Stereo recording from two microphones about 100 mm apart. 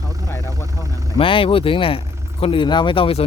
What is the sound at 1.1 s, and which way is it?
Speech, 60° left (ahead or behind).